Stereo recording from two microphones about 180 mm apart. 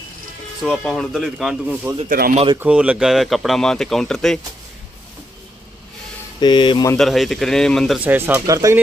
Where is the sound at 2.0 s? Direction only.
55° right (ahead or behind).